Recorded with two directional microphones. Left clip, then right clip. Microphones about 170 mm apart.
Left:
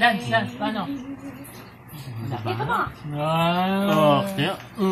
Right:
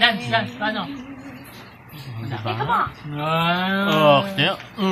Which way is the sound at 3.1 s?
45° left (ahead or behind).